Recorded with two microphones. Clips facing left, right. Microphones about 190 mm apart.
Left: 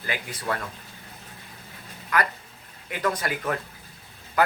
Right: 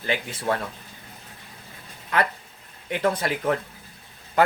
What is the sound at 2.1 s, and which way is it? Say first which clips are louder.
Speech: right 2 dB; 25° right (ahead or behind).